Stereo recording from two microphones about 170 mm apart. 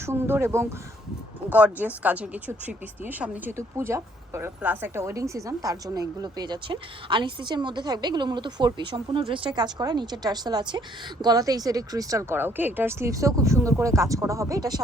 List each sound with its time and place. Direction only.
0.0 s speech: 15° right (ahead or behind)